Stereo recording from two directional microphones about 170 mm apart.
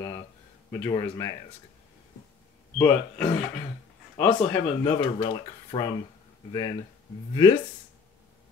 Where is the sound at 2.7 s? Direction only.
15° left (ahead or behind).